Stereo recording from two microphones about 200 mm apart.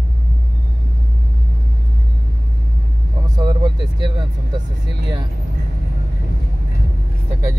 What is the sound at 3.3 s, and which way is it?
Vehicle, 20° right (ahead or behind).